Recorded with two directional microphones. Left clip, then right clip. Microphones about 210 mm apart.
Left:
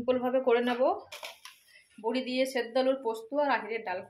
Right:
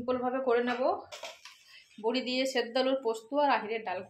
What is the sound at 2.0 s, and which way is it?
A woman's voice, 15° right (ahead or behind).